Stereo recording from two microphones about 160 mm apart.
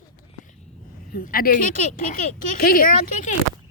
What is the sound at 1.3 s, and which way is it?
Speech, 60° left (ahead or behind).